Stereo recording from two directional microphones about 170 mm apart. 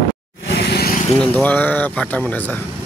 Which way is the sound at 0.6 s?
70° left (ahead or behind).